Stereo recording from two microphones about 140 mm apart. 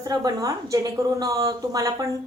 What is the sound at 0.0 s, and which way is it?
Speech, 25° right (ahead or behind).